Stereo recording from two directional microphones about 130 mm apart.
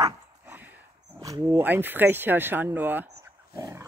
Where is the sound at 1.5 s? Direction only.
15° right (ahead or behind).